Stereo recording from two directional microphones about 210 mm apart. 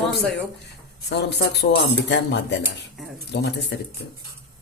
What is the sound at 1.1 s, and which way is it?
Speech, 55° left (ahead or behind).